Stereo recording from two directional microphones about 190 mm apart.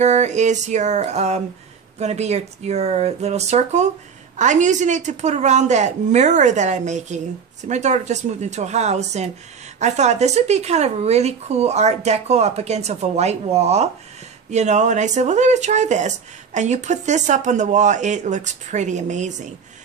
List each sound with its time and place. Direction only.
0.0 s speech: 35° right (ahead or behind)